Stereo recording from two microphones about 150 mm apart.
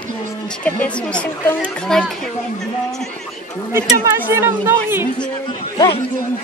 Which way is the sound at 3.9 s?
20° right (ahead or behind).